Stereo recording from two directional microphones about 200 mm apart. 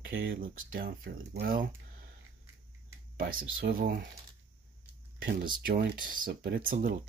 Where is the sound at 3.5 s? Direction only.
45° right (ahead or behind).